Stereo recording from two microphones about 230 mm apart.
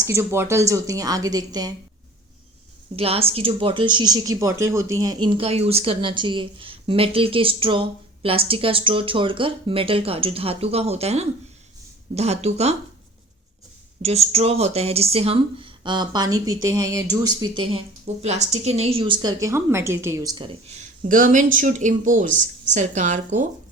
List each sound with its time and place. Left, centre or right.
0.0 s a woman's voice: centre
2.9 s speech: right
14.0 s speech: right